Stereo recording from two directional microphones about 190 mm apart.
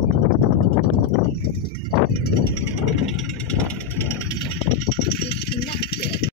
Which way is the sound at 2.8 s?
Centre (ahead or behind).